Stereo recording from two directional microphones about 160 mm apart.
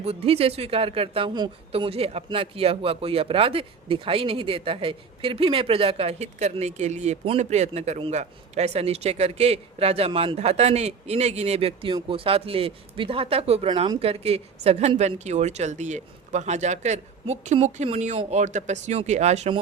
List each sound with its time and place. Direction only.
0.0 s speech: 40° right (ahead or behind)